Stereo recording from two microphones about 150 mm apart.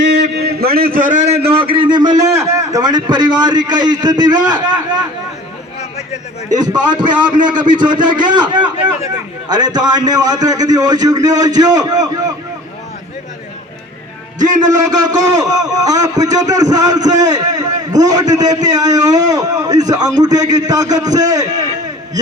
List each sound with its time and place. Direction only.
0.3 s a man's voice: 90° right; by 1.5 s 50° right (ahead or behind)
1.5 s a man's voice: 35° right (ahead or behind)
6.6 s a man's voice: 30° right (ahead or behind)
14.3 s a man's voice: 55° right (ahead or behind)
14.8 s a man's voice: 25° right (ahead or behind)